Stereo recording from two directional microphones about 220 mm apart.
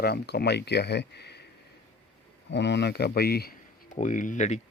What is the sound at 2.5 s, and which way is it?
Speech, 50° left (ahead or behind).